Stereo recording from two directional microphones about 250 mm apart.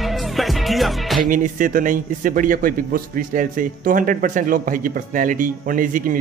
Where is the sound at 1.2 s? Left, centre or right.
Right.